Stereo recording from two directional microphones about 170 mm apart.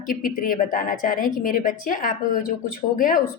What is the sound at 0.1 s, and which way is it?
A woman's voice, 55° left (ahead or behind).